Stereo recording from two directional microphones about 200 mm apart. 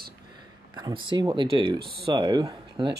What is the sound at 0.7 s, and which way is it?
Speech, 20° right (ahead or behind).